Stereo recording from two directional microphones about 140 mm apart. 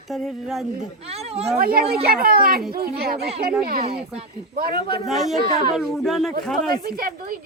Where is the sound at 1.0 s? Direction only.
45° right (ahead or behind).